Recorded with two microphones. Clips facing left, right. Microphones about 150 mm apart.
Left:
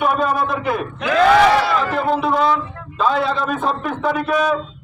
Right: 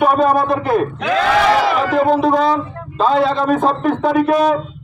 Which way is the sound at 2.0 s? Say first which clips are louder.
Right 1 dB; 40° right (ahead or behind).